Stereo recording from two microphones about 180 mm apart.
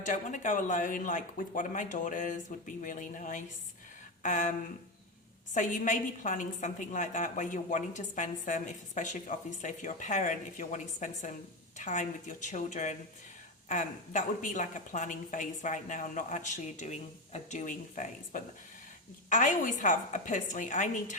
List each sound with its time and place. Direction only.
0.0 s a woman's voice: 45° left (ahead or behind)
5.5 s a woman's voice: 45° left (ahead or behind)